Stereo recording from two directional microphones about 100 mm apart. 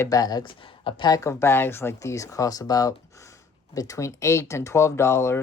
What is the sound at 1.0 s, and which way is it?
Speech, 35° left (ahead or behind).